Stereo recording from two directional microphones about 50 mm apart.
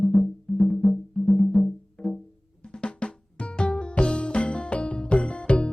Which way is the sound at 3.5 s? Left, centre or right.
Centre.